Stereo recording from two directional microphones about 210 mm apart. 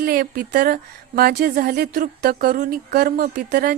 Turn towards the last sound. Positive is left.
turn(degrees=-45)  # may be behind; listen again after turning